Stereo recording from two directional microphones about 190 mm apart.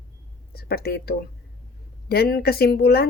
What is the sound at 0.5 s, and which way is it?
Speech, 55° left (ahead or behind).